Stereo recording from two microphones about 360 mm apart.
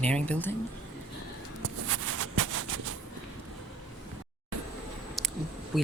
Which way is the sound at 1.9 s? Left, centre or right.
Right.